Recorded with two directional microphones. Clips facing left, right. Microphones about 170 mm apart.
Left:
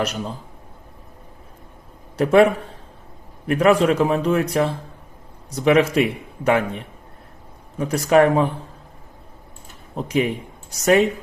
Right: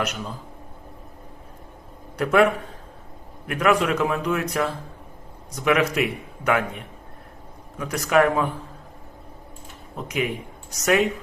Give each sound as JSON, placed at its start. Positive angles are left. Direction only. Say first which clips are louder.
{"t": 2.1, "sound": "a man's voice", "louder": "left 4 dB", "side_deg": 30}
{"t": 7.8, "sound": "a man's voice", "louder": "left 4 dB", "side_deg": 30}
{"t": 9.9, "sound": "a man's voice", "louder": "left 5 dB", "side_deg": 30}